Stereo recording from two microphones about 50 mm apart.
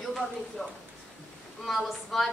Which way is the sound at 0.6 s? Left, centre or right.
Centre.